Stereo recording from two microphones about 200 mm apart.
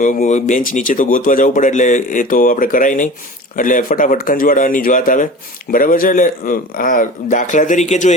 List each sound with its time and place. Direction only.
0.0 s speech: 40° left (ahead or behind)